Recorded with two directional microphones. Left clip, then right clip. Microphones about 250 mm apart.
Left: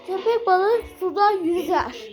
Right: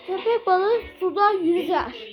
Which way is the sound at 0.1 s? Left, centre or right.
Centre.